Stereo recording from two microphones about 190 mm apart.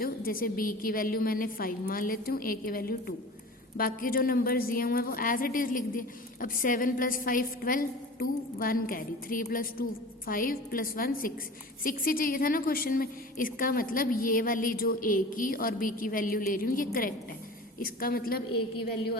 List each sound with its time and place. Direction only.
0.0 s a woman's voice: 50° left (ahead or behind)